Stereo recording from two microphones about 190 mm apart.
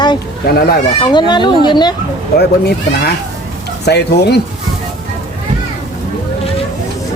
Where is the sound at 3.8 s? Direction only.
60° left (ahead or behind).